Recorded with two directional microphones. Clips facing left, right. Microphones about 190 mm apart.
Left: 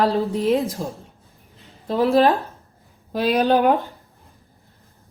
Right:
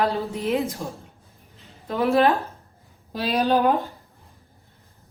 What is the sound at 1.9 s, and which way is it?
Speech, 35° left (ahead or behind).